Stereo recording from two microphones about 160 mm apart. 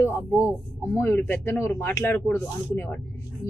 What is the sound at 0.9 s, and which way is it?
A woman's voice, 15° left (ahead or behind).